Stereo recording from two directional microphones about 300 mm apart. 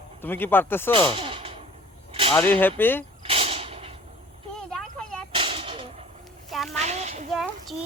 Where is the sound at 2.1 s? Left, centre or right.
Centre.